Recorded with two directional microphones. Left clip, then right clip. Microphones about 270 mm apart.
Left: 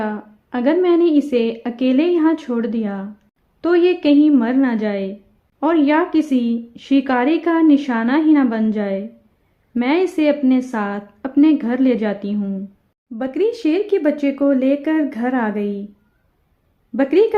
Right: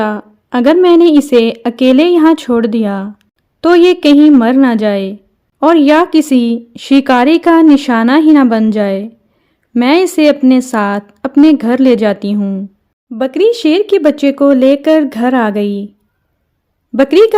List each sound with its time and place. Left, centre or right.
0.0 s a woman's voice: right
16.9 s speech: right